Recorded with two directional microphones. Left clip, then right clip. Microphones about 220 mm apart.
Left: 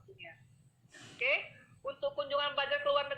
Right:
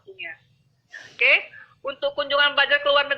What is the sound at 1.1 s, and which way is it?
Speech, 15° right (ahead or behind).